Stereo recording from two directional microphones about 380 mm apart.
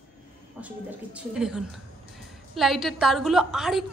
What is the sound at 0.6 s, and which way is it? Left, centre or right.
A woman's voice, centre.